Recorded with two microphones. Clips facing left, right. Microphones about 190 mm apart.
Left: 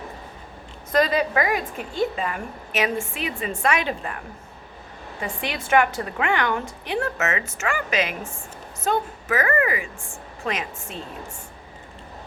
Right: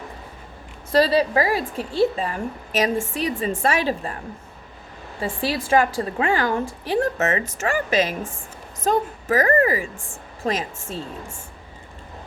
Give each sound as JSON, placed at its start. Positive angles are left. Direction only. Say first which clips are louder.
{"t": 0.9, "sound": "a woman's voice", "louder": "right 3 dB", "side_deg": -35}
{"t": 5.2, "sound": "a woman's voice", "louder": "right 5 dB", "side_deg": -30}